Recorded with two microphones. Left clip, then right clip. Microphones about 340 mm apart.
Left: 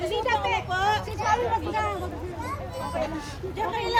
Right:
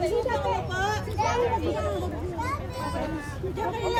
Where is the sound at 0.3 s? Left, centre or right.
Left.